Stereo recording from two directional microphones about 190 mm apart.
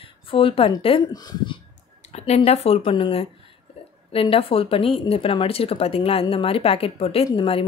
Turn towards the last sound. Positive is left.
turn(degrees=30)  # may be behind; listen again after turning